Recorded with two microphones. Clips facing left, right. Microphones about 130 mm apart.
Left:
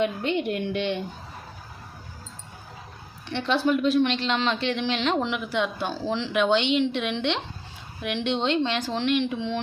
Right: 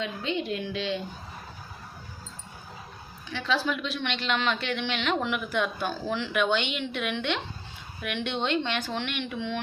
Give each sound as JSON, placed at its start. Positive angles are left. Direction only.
{"t": 0.0, "sound": "a woman's voice", "side_deg": 55}
{"t": 3.2, "sound": "a woman's voice", "side_deg": 65}
{"t": 3.8, "sound": "speech", "side_deg": 40}